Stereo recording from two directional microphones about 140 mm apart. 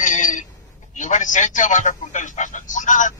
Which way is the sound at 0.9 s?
60° left (ahead or behind).